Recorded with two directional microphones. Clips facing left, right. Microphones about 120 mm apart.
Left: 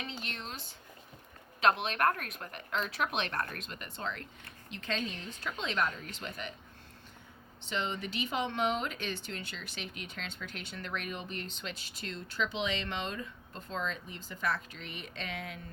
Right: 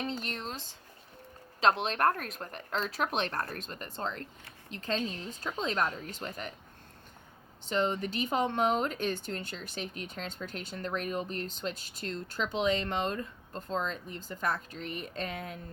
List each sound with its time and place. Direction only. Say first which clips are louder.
0.0 s a sound: right 6 dB; 40° right (ahead or behind)
1.6 s speech: right 2 dB; 35° right (ahead or behind)
7.7 s speech: right 6 dB; 45° right (ahead or behind)